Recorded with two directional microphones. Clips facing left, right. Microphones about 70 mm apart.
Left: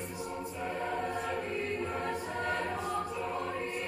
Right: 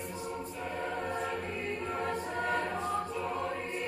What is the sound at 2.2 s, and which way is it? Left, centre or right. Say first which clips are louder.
Choir: right 2 dB; centre.